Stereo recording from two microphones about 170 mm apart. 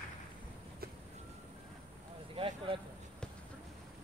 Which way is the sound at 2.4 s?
35° right (ahead or behind).